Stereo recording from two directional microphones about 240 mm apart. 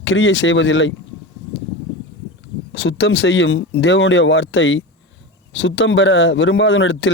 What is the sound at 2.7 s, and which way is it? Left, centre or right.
Speech, left.